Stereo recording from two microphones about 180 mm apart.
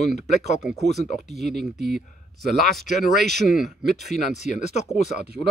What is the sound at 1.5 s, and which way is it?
Speech, 65° right (ahead or behind).